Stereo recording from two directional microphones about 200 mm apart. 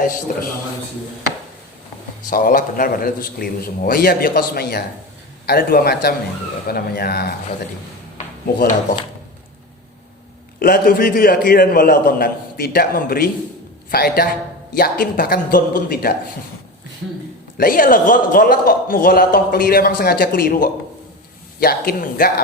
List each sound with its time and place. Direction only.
0.0 s a man's voice: 45° left (ahead or behind)
2.3 s a man's voice: 45° left (ahead or behind)
10.6 s a man's voice: 45° left (ahead or behind)
17.6 s a man's voice: 45° left (ahead or behind)